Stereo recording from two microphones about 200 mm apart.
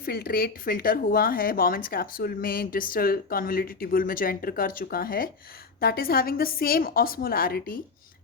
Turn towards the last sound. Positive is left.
turn(degrees=45)  # may be behind; listen again after turning